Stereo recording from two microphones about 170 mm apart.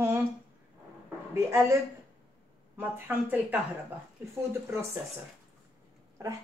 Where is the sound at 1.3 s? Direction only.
15° right (ahead or behind).